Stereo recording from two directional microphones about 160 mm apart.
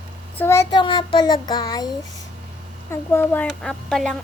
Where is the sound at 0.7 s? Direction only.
30° left (ahead or behind).